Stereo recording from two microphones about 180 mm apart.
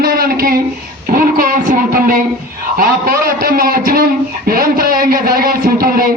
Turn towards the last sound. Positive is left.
turn(degrees=-55)  # may be behind; listen again after turning